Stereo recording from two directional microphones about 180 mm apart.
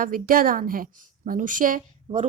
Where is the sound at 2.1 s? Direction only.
35° right (ahead or behind).